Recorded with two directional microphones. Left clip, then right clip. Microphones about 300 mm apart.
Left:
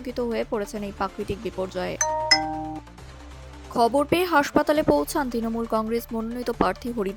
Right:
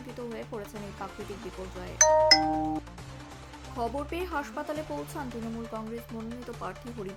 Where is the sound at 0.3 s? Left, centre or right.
Left.